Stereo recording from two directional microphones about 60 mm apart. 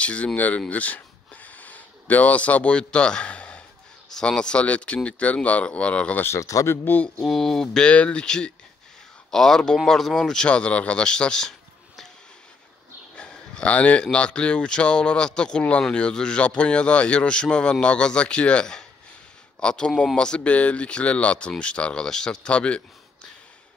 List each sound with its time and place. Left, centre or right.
0.0 s speech: centre
6.4 s a man's voice: left
6.7 s speech: left
7.2 s a man's voice: centre
13.1 s a sound: centre
14.1 s a man's voice: centre